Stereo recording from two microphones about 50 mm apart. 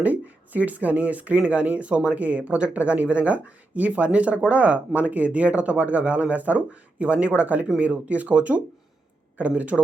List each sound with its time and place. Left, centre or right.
0.0 s speech: right